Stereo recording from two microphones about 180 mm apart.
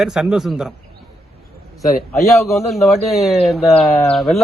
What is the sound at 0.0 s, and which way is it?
Speech, centre (ahead or behind).